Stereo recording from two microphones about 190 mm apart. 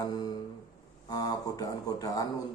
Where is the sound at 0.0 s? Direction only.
20° left (ahead or behind).